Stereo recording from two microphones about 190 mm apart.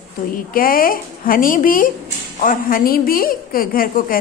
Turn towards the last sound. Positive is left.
turn(degrees=45)  # may be behind; listen again after turning